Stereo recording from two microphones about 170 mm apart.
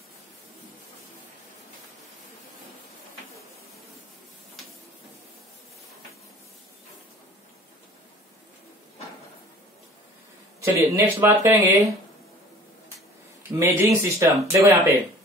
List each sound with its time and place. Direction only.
10.6 s speech: 15° right (ahead or behind)
13.4 s speech: 15° right (ahead or behind)